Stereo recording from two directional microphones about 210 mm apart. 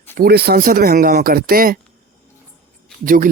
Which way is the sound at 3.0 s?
40° right (ahead or behind).